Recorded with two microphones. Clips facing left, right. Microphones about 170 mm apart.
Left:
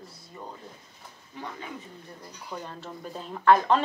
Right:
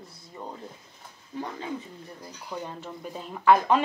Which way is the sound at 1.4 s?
25° right (ahead or behind).